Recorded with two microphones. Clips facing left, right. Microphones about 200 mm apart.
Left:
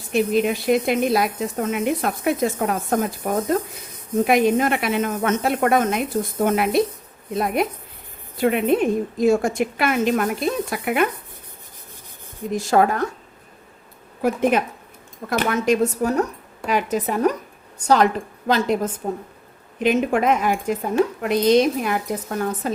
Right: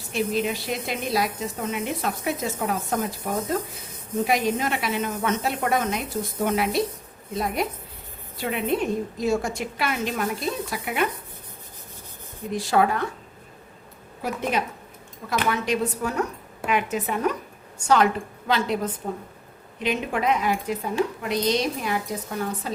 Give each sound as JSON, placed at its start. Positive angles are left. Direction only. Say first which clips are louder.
{"t": 0.1, "sound": "a woman's voice", "louder": "left 6 dB", "side_deg": 55}
{"t": 12.5, "sound": "speech", "louder": "left 4 dB", "side_deg": 45}
{"t": 14.2, "sound": "a woman's voice", "louder": "left 7 dB", "side_deg": 50}